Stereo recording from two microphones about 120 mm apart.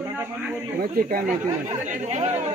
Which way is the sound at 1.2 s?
90° right.